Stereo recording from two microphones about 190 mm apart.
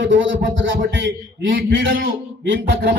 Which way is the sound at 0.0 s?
75° right (ahead or behind).